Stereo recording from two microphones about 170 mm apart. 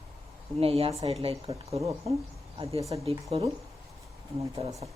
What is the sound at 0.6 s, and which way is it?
A woman's voice, 35° right (ahead or behind).